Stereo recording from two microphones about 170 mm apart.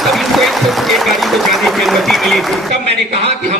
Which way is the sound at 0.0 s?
Centre (ahead or behind).